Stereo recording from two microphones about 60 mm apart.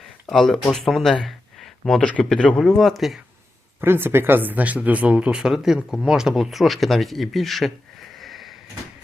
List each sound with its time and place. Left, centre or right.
0.0 s speech: centre
1.5 s a sound: centre
2.0 s speech: centre
2.6 s speech: centre
3.8 s speech: right; by 7.7 s centre
8.1 s sniff: centre